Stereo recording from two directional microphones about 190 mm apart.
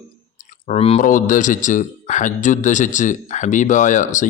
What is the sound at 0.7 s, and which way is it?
A man's voice, 35° left (ahead or behind).